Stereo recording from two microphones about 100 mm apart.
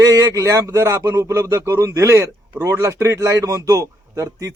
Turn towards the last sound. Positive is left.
turn(degrees=-30)  # may be behind; listen again after turning